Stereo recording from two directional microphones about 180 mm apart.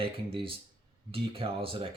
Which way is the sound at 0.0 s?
30° right (ahead or behind).